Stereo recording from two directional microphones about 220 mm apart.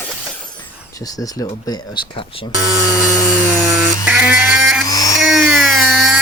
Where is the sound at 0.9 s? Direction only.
15° left (ahead or behind).